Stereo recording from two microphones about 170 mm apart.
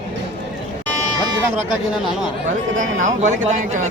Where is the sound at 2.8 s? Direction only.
45° right (ahead or behind).